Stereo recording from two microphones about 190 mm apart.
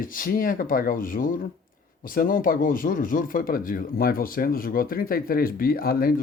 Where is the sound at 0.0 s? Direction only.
50° left (ahead or behind).